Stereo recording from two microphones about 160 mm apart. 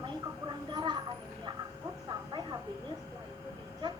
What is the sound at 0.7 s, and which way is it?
Speech, 25° right (ahead or behind).